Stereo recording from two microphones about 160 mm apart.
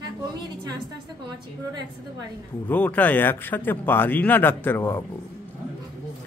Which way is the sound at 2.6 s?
10° left (ahead or behind).